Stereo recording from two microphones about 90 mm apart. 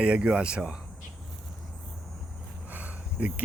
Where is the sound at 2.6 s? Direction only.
20° right (ahead or behind).